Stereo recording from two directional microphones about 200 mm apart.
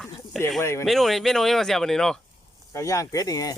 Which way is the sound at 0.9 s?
Centre (ahead or behind).